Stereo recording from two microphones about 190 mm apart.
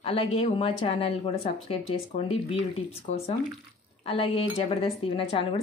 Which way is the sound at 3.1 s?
40° left (ahead or behind).